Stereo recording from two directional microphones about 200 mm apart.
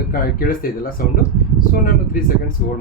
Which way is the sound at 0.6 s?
45° left (ahead or behind).